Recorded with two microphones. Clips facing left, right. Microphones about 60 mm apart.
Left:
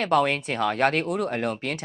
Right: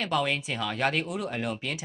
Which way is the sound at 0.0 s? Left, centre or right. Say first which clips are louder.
Left 6 dB; left.